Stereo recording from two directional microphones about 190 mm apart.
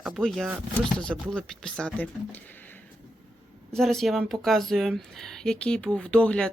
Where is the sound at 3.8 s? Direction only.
Centre (ahead or behind).